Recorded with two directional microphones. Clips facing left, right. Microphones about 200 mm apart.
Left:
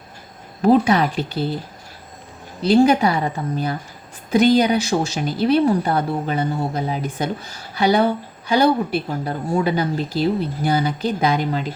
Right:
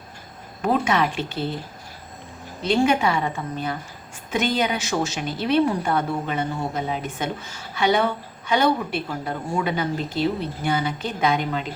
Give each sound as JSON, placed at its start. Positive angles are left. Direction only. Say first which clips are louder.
{"t": 0.6, "sound": "speech", "louder": "left 6 dB", "side_deg": 35}
{"t": 2.6, "sound": "speech", "louder": "left 5 dB", "side_deg": 35}